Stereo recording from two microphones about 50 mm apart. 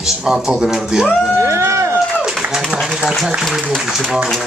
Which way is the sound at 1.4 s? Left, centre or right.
Right.